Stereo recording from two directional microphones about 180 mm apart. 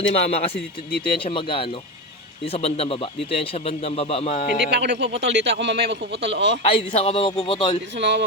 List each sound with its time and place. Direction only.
0.1 s speech: 35° left (ahead or behind)
4.7 s a man's voice: 75° right (ahead or behind)
6.6 s speech: 35° left (ahead or behind)
7.9 s speech: 75° right (ahead or behind)